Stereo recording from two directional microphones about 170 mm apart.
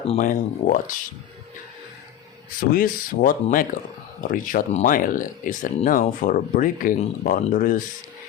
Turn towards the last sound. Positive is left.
turn(degrees=55)  # may be behind; listen again after turning